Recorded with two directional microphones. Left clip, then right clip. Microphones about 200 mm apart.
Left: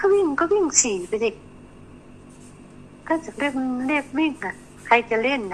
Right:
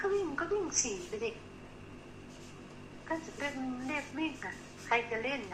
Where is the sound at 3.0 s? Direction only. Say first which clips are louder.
Left 13 dB; 50° left (ahead or behind).